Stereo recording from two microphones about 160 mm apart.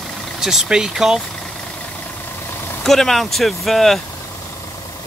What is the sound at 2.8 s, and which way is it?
Speech, centre (ahead or behind).